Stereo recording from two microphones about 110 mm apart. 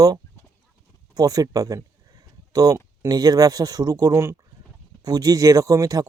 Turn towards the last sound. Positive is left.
turn(degrees=-30)  # may be behind; listen again after turning